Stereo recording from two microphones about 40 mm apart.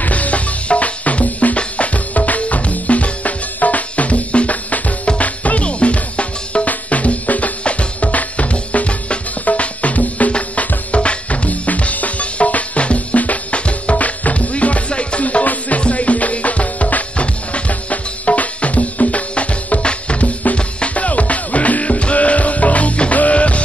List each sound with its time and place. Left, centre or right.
0.0 s music: left